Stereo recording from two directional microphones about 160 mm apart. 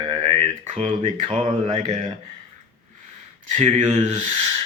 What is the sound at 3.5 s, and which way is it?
Speech, 45° right (ahead or behind).